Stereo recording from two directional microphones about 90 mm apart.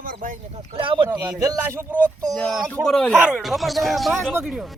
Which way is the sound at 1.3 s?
40° right (ahead or behind).